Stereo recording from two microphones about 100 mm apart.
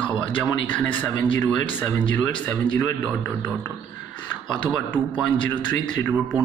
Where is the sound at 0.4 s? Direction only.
15° left (ahead or behind).